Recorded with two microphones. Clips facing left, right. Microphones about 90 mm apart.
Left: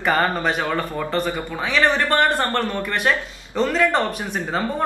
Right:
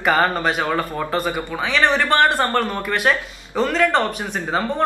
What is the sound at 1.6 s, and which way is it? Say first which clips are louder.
Speech: right 1 dB; centre (ahead or behind).